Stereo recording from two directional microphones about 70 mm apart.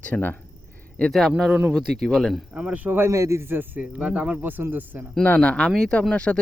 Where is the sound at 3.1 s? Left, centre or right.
Right.